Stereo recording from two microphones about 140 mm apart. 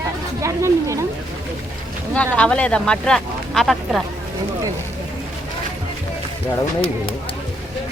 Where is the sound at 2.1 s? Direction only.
10° left (ahead or behind).